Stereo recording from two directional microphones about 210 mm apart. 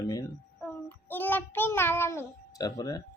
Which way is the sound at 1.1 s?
10° left (ahead or behind).